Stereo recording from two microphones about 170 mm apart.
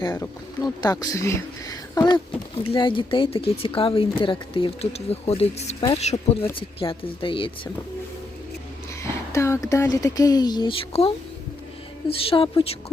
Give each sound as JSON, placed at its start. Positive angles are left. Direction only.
{"t": 0.0, "sound": "speech", "side_deg": 20}
{"t": 9.0, "sound": "speech", "side_deg": 15}